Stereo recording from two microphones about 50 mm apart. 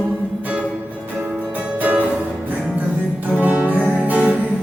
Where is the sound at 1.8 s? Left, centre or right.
Right.